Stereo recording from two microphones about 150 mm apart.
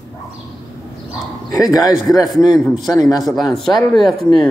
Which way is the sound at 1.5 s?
25° left (ahead or behind).